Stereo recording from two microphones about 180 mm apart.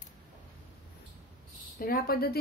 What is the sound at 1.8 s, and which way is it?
Speech, 55° left (ahead or behind).